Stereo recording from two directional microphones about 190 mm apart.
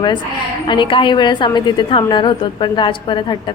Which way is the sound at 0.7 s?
25° left (ahead or behind).